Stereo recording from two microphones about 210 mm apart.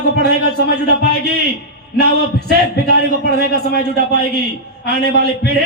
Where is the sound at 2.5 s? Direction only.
50° left (ahead or behind).